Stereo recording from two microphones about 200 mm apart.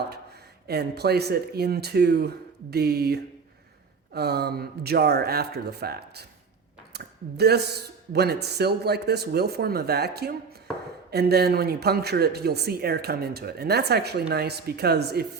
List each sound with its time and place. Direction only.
0.7 s speech: 55° right (ahead or behind)